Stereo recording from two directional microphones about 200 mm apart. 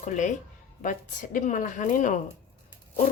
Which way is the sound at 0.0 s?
35° left (ahead or behind).